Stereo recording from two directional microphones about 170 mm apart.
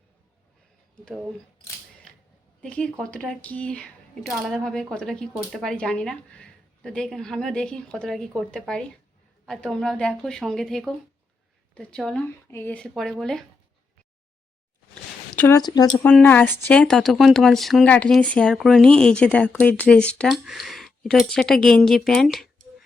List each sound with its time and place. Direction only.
2.1 s a sound: 5° left (ahead or behind)
2.6 s speech: 5° left (ahead or behind)
15.4 s a woman's voice: 15° left (ahead or behind)
15.6 s speech: 25° left (ahead or behind)
16.0 s speech: 10° left (ahead or behind)